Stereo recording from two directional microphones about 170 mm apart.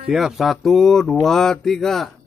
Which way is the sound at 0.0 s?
5° right (ahead or behind).